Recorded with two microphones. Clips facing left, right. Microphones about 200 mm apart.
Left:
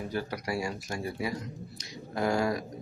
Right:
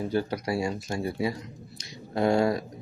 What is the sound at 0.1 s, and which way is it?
Speech, 25° right (ahead or behind).